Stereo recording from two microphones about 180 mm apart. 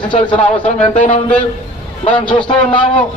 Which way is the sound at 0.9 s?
45° left (ahead or behind).